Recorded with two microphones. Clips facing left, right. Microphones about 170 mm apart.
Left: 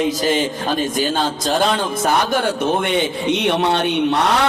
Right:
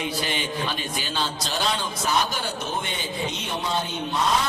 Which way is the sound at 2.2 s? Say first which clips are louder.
Left 10 dB; 75° left (ahead or behind).